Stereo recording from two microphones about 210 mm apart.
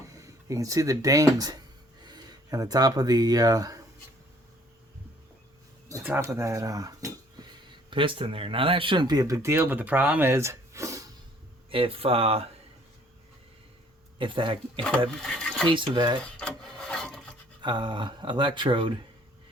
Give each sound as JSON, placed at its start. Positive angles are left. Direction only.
{"t": 0.1, "sound": "speech", "side_deg": -15}
{"t": 5.9, "sound": "speech", "side_deg": -10}
{"t": 7.4, "sound": "a sound", "side_deg": -20}
{"t": 7.9, "sound": "speech", "side_deg": -25}
{"t": 11.7, "sound": "speech", "side_deg": -25}
{"t": 14.2, "sound": "speech", "side_deg": -25}
{"t": 15.2, "sound": "a sound", "side_deg": 5}
{"t": 15.7, "sound": "speech", "side_deg": -20}
{"t": 16.4, "sound": "wood", "side_deg": 5}
{"t": 17.6, "sound": "speech", "side_deg": -20}